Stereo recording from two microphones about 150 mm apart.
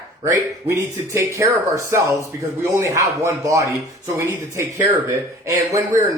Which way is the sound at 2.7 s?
20° right (ahead or behind).